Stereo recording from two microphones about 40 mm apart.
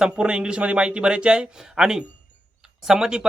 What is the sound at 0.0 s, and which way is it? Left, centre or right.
Speech, right.